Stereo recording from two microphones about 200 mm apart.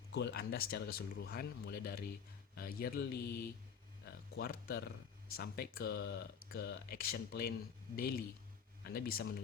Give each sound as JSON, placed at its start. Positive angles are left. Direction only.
{"t": 0.1, "sound": "speech", "side_deg": 60}
{"t": 8.8, "sound": "speech", "side_deg": 50}